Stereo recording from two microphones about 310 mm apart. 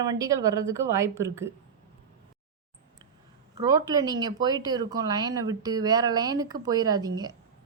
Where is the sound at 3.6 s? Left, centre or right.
Centre.